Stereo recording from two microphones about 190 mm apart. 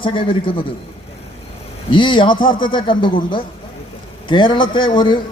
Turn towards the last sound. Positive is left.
turn(degrees=25)  # may be behind; listen again after turning